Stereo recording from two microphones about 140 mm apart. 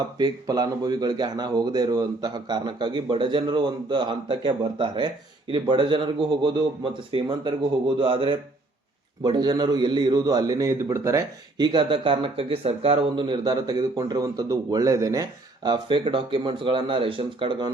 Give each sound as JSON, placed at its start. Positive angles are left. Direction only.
{"t": 0.2, "sound": "a man's voice", "side_deg": -30}